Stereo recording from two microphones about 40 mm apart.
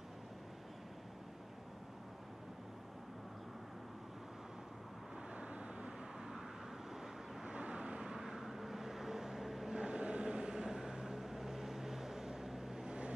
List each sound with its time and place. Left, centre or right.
5.3 s vehicle: right
7.4 s vehicle: right; by 9.8 s centre
9.8 s vehicle: right
12.8 s vehicle: right